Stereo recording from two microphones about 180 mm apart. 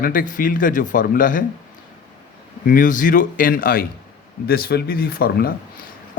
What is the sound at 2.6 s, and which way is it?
A man's voice, 50° left (ahead or behind).